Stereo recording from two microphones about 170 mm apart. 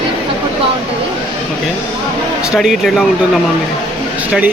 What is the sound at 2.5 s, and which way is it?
Speech, centre (ahead or behind).